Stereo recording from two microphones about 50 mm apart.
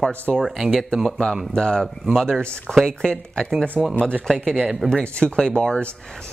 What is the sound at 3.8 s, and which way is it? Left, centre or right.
Speech, centre.